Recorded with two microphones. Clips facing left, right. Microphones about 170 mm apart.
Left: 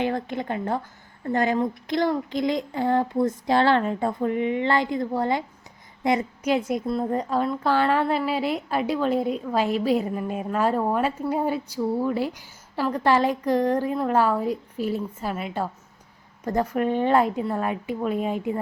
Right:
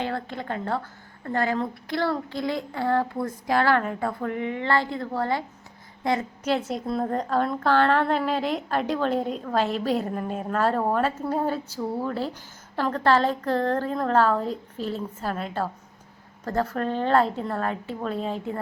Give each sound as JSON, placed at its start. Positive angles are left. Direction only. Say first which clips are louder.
{"t": 0.0, "sound": "a woman's voice", "louder": "left 4 dB", "side_deg": 15}